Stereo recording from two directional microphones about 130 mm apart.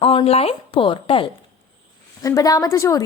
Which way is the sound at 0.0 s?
45° left (ahead or behind).